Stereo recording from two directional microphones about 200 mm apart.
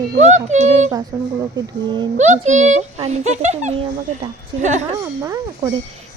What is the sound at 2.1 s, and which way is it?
Speech, 35° right (ahead or behind).